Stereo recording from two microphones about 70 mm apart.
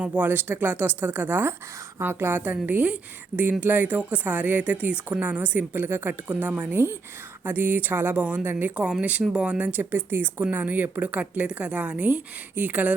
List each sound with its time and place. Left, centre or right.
0.0 s a woman's voice: right
9.9 s a woman's voice: right